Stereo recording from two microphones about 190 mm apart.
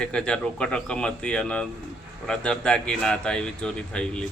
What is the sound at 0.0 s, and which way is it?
Speech, 5° left (ahead or behind).